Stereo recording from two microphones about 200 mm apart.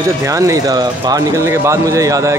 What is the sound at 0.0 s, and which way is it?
Speech, 15° right (ahead or behind).